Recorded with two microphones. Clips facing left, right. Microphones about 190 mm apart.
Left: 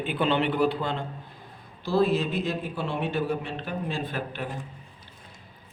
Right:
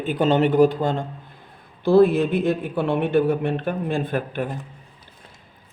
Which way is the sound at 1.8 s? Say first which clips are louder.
Right 8 dB; 55° right (ahead or behind).